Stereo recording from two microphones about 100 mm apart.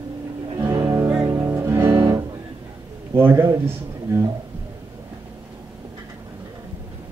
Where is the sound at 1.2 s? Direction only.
35° right (ahead or behind).